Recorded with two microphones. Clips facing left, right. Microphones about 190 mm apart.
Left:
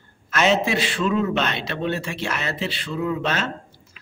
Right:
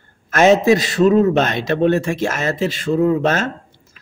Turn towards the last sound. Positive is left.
turn(degrees=-45)  # may be behind; listen again after turning